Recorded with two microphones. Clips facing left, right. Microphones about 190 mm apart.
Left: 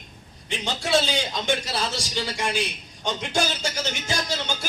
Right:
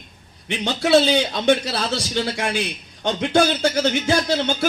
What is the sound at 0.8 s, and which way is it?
A man's voice, 65° right (ahead or behind).